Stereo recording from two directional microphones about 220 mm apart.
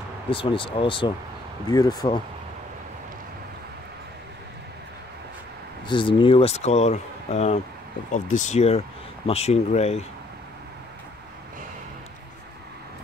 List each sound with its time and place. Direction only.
0.3 s speech: 25° left (ahead or behind)
5.9 s speech: 20° left (ahead or behind)